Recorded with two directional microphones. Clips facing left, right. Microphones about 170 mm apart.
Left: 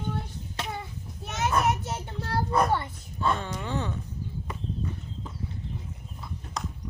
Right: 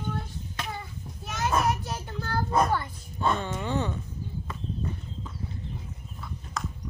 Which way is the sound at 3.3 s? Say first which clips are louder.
Right 2 dB; centre (ahead or behind).